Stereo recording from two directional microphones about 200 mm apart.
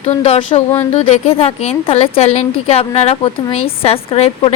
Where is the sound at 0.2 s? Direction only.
30° left (ahead or behind).